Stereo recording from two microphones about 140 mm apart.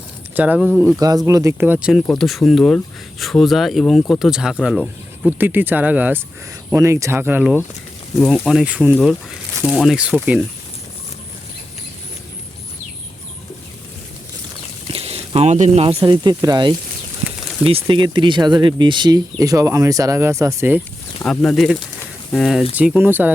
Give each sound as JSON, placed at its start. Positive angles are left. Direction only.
{"t": 0.3, "sound": "speech", "side_deg": -10}
{"t": 0.9, "sound": "speech", "side_deg": -25}
{"t": 1.9, "sound": "speech", "side_deg": 0}
{"t": 5.4, "sound": "speech", "side_deg": -15}
{"t": 8.2, "sound": "speech", "side_deg": 0}
{"t": 14.9, "sound": "a sound", "side_deg": -45}
{"t": 16.0, "sound": "speech", "side_deg": -30}
{"t": 21.2, "sound": "speech", "side_deg": 0}
{"t": 22.7, "sound": "speech", "side_deg": -10}